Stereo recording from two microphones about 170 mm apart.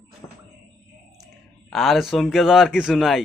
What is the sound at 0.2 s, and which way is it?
Music, 15° left (ahead or behind).